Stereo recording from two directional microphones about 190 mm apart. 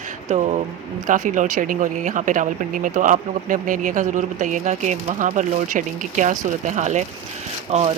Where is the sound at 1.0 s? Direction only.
45° right (ahead or behind).